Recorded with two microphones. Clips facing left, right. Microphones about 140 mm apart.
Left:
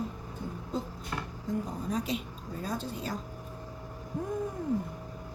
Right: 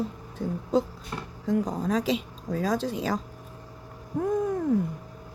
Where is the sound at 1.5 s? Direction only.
90° right.